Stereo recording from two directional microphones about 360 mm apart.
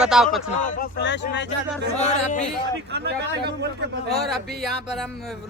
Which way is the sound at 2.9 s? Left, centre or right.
Right.